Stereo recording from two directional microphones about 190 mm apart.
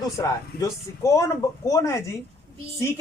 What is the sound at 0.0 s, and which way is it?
Speech, 20° left (ahead or behind).